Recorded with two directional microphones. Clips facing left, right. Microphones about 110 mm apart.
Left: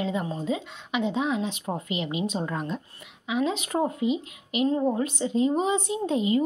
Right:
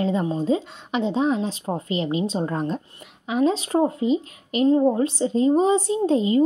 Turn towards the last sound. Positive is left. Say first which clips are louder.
# right 5 dB
turn(degrees=-30)  # may be behind; listen again after turning